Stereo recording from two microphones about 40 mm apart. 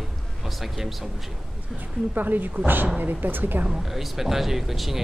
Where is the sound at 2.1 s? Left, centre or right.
Right.